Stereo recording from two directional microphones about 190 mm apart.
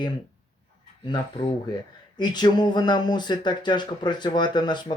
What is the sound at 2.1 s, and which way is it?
Speech, 25° left (ahead or behind).